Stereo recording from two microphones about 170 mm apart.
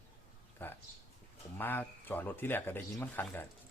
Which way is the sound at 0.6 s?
10° left (ahead or behind).